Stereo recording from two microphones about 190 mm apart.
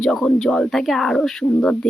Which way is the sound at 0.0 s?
Centre (ahead or behind).